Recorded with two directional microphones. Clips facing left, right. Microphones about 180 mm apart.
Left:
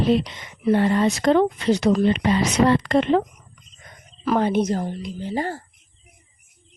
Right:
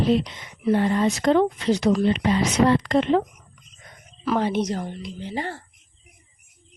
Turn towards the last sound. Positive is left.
turn(degrees=40)  # may be behind; listen again after turning